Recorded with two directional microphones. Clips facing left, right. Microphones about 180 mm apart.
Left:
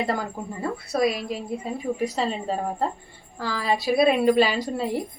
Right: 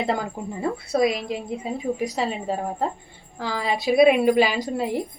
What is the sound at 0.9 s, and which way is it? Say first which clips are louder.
A woman's voice: right 2 dB; 20° right (ahead or behind).